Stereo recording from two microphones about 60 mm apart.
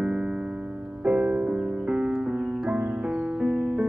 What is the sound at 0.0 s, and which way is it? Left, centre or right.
Music, centre.